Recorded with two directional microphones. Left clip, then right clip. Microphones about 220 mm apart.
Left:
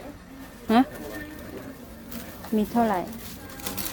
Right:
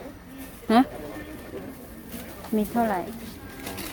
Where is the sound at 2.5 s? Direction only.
10° left (ahead or behind).